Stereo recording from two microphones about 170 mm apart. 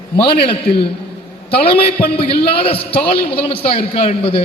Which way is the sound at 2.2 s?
35° left (ahead or behind).